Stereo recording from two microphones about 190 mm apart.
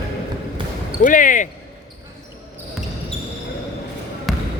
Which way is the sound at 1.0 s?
45° left (ahead or behind).